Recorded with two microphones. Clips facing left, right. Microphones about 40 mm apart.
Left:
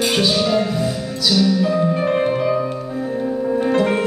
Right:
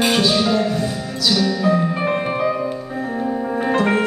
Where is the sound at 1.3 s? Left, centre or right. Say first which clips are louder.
Left 1 dB; centre.